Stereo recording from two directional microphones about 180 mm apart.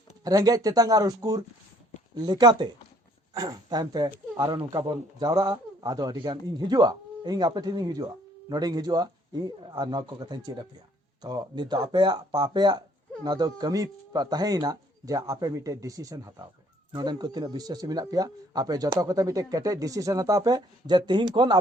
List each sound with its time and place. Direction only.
0.3 s speech: 20° right (ahead or behind)